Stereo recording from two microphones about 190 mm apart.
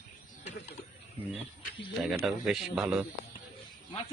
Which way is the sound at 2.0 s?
Centre (ahead or behind).